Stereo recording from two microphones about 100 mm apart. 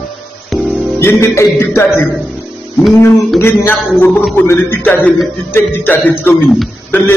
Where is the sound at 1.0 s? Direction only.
25° left (ahead or behind).